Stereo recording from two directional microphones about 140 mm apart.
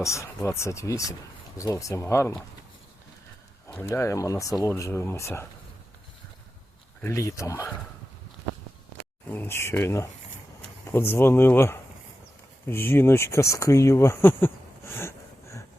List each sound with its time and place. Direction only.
0.0 s speech: 20° left (ahead or behind)
3.7 s speech: 15° left (ahead or behind)
7.0 s speech: 20° left (ahead or behind)
9.3 s speech: 15° left (ahead or behind)